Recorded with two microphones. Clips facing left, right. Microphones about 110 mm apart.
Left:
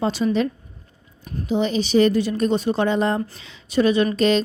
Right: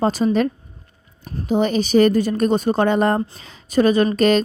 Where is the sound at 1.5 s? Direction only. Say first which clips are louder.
Right 3 dB; 50° right (ahead or behind).